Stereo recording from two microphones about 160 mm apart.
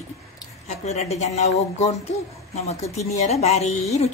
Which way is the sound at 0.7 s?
45° left (ahead or behind).